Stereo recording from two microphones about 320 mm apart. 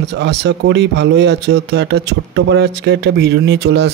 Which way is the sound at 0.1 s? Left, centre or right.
Right.